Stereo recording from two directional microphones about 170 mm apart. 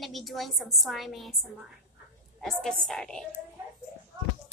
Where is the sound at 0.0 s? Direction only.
Centre (ahead or behind).